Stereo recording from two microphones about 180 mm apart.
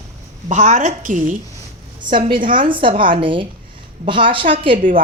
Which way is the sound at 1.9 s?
25° right (ahead or behind).